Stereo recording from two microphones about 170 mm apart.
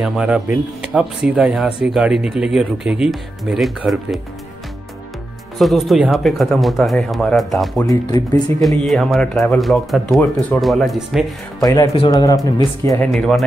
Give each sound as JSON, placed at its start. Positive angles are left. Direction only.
{"t": 0.0, "sound": "speech", "side_deg": -5}
{"t": 5.6, "sound": "speech", "side_deg": 0}
{"t": 7.8, "sound": "speech", "side_deg": 20}
{"t": 8.5, "sound": "speech", "side_deg": 0}
{"t": 11.6, "sound": "speech", "side_deg": 20}
{"t": 13.0, "sound": "speech", "side_deg": 5}